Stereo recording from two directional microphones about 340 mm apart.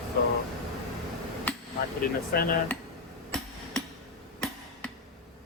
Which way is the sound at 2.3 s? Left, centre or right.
Left.